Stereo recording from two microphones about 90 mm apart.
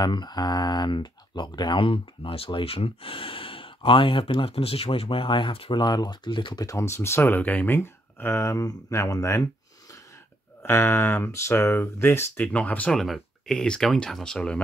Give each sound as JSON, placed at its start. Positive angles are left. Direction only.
{"t": 0.0, "sound": "speech", "side_deg": 50}
{"t": 6.6, "sound": "speech", "side_deg": 35}
{"t": 10.6, "sound": "speech", "side_deg": 25}
{"t": 12.9, "sound": "speech", "side_deg": 5}